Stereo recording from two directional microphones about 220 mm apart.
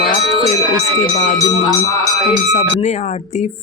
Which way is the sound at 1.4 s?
15° left (ahead or behind).